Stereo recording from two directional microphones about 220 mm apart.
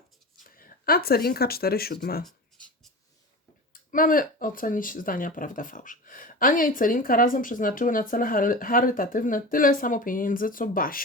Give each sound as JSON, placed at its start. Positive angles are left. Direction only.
{"t": 0.5, "sound": "speech", "side_deg": 40}
{"t": 2.2, "sound": "writing", "side_deg": 0}
{"t": 3.7, "sound": "speech", "side_deg": 40}